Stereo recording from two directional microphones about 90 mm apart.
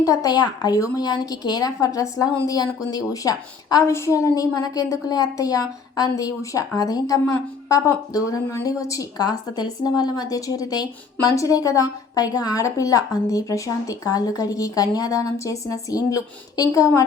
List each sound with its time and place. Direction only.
0.0 s a woman's voice: 40° left (ahead or behind)